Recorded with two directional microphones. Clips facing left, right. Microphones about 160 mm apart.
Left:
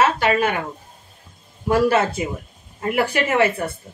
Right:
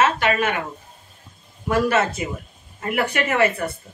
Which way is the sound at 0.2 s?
35° left (ahead or behind).